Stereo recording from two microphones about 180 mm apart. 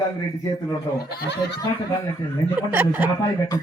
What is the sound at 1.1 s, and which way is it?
Speech, 65° left (ahead or behind).